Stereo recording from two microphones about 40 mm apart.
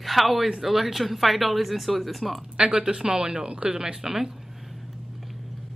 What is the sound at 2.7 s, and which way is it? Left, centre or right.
A woman's voice, right.